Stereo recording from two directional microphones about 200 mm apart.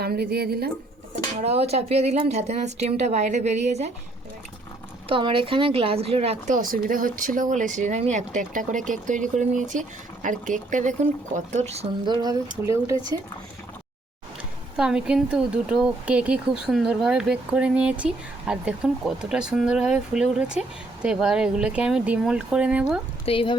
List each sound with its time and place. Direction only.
0.0 s speech: 50° right (ahead or behind)
1.4 s speech: 30° right (ahead or behind)
5.0 s speech: 25° right (ahead or behind)
6.6 s speech: 45° right (ahead or behind)
12.2 s speech: 15° right (ahead or behind)
14.8 s speech: 5° right (ahead or behind)
23.2 s speech: 25° left (ahead or behind)